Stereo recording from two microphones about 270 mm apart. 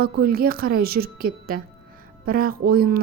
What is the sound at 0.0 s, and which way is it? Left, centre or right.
A woman's voice, right.